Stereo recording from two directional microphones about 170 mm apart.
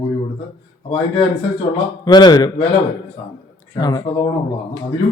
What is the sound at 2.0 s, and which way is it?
Speech, 25° left (ahead or behind).